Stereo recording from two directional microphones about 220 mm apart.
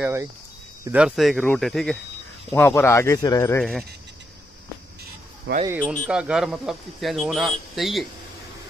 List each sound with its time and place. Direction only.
0.0 s speech: 10° right (ahead or behind); by 3.6 s 10° left (ahead or behind)
5.5 s speech: 60° right (ahead or behind)
6.0 s speech: 5° right (ahead or behind)